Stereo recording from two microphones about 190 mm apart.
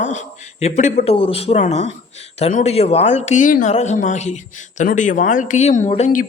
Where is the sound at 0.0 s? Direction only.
40° left (ahead or behind).